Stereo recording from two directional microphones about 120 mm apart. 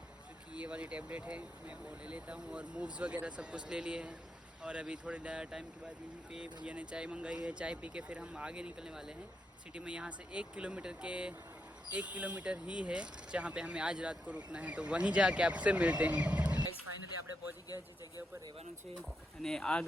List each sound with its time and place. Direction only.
0.5 s speech: 10° right (ahead or behind)
19.4 s speech: 5° left (ahead or behind)